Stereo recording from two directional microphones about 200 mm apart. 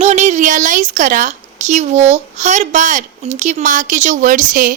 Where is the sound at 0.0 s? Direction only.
35° right (ahead or behind).